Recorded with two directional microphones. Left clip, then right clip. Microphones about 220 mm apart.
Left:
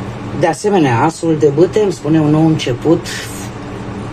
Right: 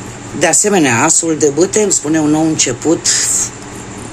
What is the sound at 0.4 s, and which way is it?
Speech, 35° right (ahead or behind).